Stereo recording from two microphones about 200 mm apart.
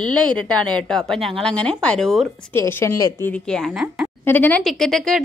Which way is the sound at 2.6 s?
10° left (ahead or behind).